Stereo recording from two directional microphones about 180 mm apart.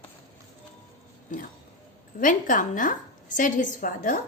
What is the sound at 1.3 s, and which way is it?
A woman's voice, 45° left (ahead or behind).